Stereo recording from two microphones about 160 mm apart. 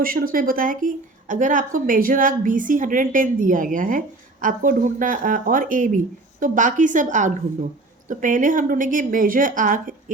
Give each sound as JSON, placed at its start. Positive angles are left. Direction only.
{"t": 0.0, "sound": "a woman's voice", "side_deg": -60}